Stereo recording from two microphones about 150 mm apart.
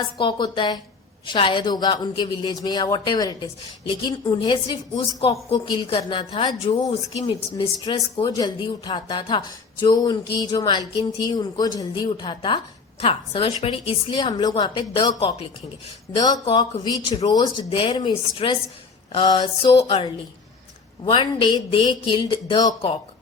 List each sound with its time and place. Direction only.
0.2 s a woman's voice: 30° left (ahead or behind)
16.1 s a woman's voice: 25° left (ahead or behind)